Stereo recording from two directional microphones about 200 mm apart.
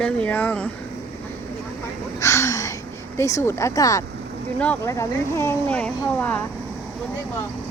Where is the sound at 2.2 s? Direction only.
15° left (ahead or behind).